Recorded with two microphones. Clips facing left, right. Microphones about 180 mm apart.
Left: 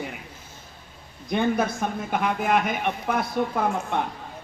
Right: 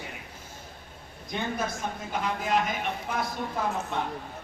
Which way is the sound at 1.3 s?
60° left (ahead or behind).